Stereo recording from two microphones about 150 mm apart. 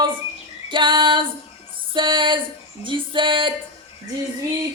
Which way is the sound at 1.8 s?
35° right (ahead or behind).